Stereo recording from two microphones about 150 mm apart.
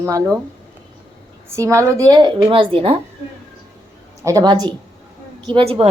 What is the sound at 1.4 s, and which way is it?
A woman's voice, 20° right (ahead or behind).